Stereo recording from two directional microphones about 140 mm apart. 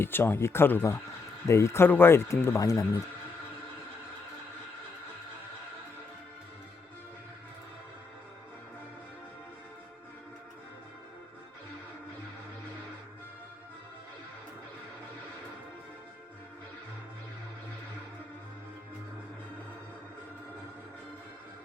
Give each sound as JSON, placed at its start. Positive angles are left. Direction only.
{"t": 0.0, "sound": "speech", "side_deg": 15}